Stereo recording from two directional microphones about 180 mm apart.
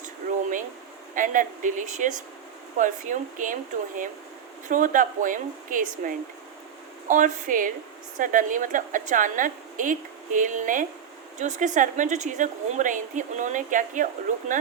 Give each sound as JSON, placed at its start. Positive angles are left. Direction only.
{"t": 1.1, "sound": "a woman's voice", "side_deg": -45}